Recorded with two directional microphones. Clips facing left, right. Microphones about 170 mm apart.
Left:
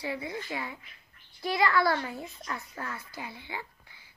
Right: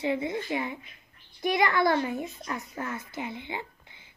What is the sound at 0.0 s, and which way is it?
A woman's voice, 20° right (ahead or behind).